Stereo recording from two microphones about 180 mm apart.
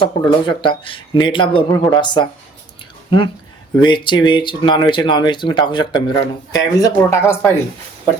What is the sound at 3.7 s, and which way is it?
Speech, 25° left (ahead or behind).